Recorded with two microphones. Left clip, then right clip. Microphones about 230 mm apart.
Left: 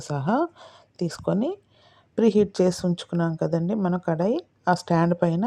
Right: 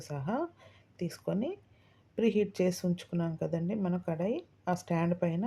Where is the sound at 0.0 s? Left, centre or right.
Left.